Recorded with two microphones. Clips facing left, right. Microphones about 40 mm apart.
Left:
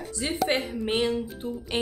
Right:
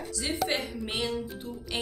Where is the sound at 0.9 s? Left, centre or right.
Left.